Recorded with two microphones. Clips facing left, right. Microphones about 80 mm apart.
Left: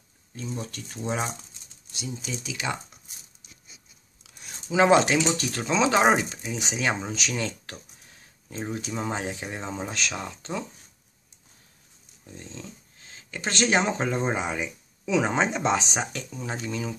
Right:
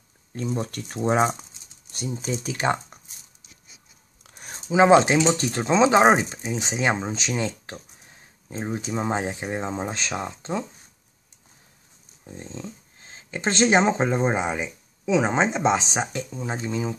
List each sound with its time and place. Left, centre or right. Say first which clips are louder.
0.3 s speech: right 7 dB; right
4.2 s a sound: right 4 dB; right
4.6 s speech: right 3 dB; right
12.3 s speech: right 5 dB; right